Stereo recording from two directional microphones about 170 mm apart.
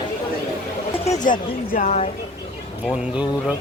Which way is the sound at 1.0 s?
45° left (ahead or behind).